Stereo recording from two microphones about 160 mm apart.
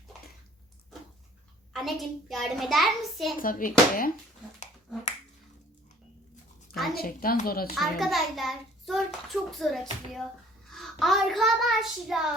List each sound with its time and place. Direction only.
1.7 s a child's voice: centre (ahead or behind)
3.4 s speech: 60° left (ahead or behind)
6.9 s a woman's voice: 70° left (ahead or behind)
7.8 s a child's voice: centre (ahead or behind)